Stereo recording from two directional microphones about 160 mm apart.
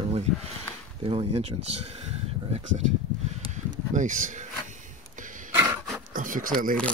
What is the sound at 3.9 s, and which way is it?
Speech, 50° right (ahead or behind).